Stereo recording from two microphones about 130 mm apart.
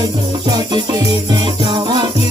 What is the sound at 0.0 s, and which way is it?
Music, 35° right (ahead or behind).